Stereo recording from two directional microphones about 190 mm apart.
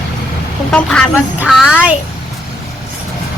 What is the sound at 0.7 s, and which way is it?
Speech, 5° left (ahead or behind).